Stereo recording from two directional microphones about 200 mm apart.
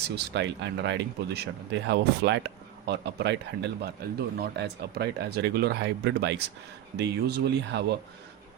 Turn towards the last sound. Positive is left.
turn(degrees=-55)  # may be behind; listen again after turning